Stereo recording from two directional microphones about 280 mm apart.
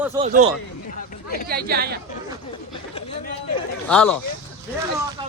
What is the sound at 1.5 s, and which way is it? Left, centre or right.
Speech, right.